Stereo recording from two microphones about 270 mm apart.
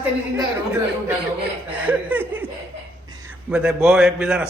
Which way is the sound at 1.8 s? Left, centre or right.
Centre.